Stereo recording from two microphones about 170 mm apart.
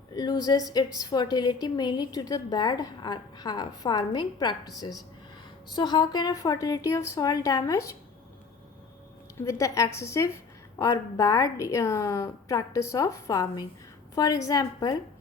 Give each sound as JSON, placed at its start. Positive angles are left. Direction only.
{"t": 0.1, "sound": "a woman's voice", "side_deg": 25}
{"t": 9.4, "sound": "a woman's voice", "side_deg": 20}